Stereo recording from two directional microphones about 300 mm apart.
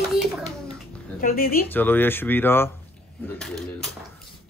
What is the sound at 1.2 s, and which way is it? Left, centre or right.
Speech, left.